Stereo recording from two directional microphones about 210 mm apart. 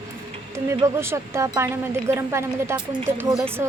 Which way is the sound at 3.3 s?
Centre (ahead or behind).